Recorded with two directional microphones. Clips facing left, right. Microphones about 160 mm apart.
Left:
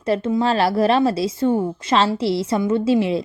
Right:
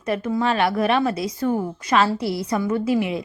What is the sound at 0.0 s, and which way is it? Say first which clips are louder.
A woman's voice: left 3 dB; 30° left (ahead or behind).